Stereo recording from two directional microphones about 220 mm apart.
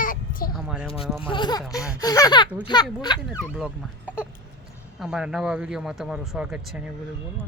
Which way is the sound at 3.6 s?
5° right (ahead or behind).